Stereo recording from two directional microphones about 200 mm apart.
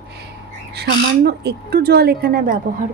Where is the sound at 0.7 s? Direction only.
55° right (ahead or behind).